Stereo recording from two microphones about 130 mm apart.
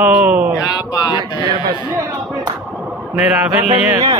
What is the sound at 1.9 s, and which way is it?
Speech, 15° right (ahead or behind).